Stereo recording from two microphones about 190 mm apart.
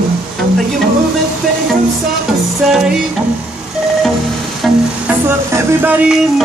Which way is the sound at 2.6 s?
5° right (ahead or behind).